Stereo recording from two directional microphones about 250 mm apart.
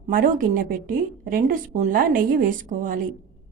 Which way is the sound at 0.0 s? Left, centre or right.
Right.